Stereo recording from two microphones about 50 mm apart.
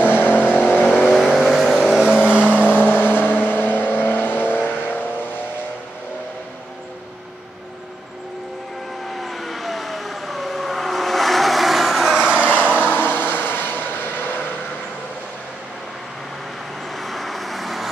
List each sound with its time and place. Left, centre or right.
0.0 s vehicle: left
0.7 s vehicle: centre; by 2.9 s right
3.1 s vehicle: left
4.5 s vehicle: right
9.1 s vehicle: centre
12.1 s vehicle: centre
12.8 s vehicle: left
16.9 s vehicle: centre